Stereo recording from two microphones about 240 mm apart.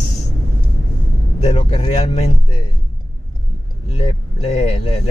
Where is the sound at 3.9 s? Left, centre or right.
Left.